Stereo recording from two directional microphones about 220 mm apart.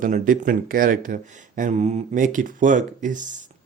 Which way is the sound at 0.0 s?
40° right (ahead or behind).